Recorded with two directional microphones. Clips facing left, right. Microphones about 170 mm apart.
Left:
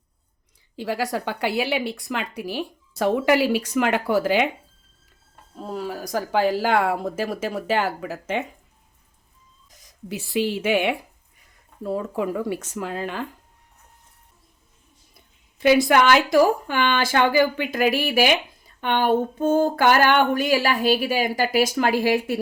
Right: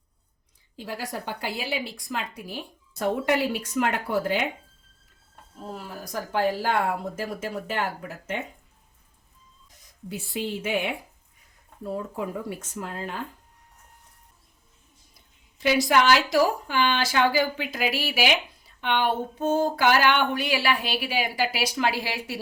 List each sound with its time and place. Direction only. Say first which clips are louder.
0.8 s a woman's voice: left 8 dB; 80° left
5.7 s speech: left 8 dB; 90° left
10.1 s a woman's voice: left 6 dB; 90° left
11.9 s speech: left 6 dB; 90° left
15.5 s speech: left 5 dB; 55° left (ahead or behind)